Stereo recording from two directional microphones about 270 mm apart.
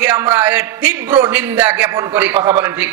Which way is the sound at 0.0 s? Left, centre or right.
Centre.